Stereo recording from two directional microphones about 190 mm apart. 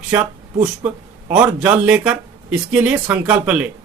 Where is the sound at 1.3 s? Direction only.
10° right (ahead or behind).